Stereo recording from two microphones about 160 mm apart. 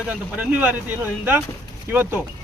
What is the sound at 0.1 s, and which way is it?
Speech, 10° right (ahead or behind).